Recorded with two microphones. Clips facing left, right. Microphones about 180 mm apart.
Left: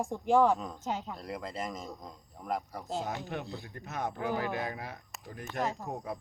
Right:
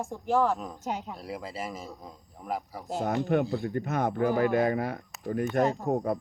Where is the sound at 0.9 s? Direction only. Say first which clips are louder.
Right 2 dB; 15° right (ahead or behind).